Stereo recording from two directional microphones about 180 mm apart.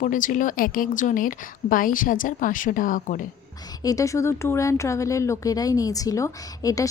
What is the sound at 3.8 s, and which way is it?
Speech, 20° left (ahead or behind).